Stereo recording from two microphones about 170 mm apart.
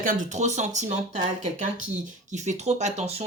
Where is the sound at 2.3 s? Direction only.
45° right (ahead or behind).